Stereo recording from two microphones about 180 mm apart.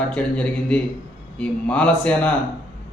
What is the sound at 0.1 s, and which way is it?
Speech, 5° left (ahead or behind).